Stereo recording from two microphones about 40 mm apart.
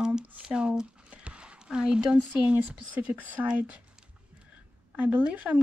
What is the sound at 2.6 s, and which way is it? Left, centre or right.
Speech, right.